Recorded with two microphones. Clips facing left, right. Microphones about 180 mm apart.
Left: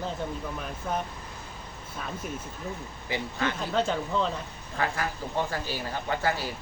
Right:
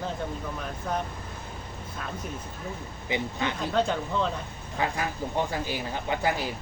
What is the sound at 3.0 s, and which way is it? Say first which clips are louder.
Speech: right 1 dB; 20° right (ahead or behind).